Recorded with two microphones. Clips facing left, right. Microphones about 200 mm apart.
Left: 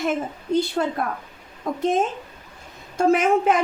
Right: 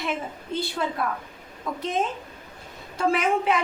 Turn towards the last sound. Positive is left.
turn(degrees=45)  # may be behind; listen again after turning